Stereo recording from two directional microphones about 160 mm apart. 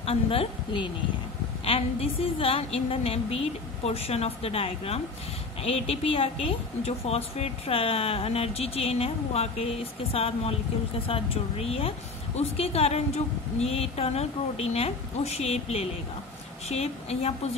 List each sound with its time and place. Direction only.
0.0 s a woman's voice: 35° left (ahead or behind)